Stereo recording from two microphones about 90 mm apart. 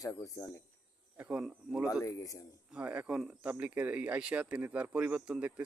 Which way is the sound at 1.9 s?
40° left (ahead or behind).